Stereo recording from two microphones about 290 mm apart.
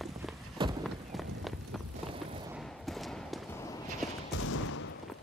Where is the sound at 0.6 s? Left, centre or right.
Centre.